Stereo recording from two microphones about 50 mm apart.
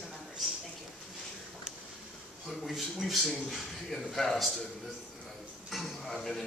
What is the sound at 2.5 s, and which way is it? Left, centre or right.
A man's voice, centre.